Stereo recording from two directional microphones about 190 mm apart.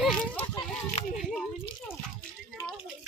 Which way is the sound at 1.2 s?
Centre (ahead or behind).